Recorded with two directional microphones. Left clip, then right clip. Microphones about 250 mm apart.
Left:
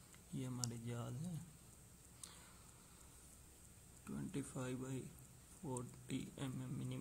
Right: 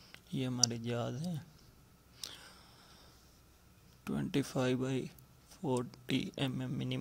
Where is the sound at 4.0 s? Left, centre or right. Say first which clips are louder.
Right 12 dB; right.